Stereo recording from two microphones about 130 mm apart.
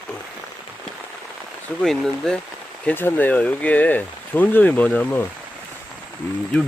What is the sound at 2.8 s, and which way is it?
Speech, 15° left (ahead or behind).